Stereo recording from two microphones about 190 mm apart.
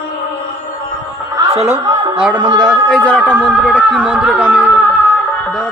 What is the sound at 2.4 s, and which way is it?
Speech, 25° right (ahead or behind).